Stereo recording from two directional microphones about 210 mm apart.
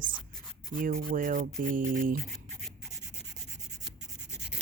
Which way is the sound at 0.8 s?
40° right (ahead or behind).